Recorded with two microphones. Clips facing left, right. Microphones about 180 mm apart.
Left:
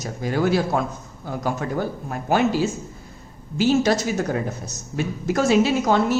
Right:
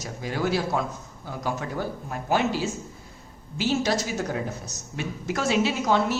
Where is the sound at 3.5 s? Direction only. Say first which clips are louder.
Left 6 dB; 50° left (ahead or behind).